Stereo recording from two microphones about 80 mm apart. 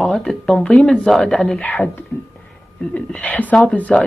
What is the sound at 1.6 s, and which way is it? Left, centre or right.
A woman's voice, left.